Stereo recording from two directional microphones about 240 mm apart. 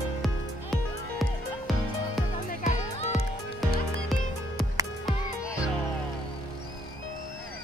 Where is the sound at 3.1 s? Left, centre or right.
Centre.